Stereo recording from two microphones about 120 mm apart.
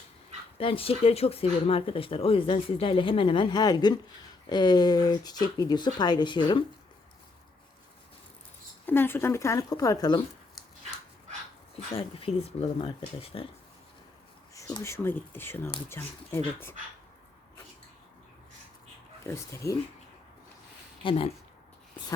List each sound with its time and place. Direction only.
0.6 s speech: 50° left (ahead or behind)
8.9 s speech: 20° left (ahead or behind)
11.9 s speech: 50° left (ahead or behind)
14.8 s speech: 20° left (ahead or behind)
19.2 s speech: 25° left (ahead or behind)
21.0 s speech: 45° left (ahead or behind)